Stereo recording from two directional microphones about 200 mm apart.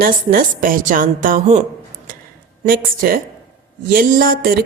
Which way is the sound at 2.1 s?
45° right (ahead or behind).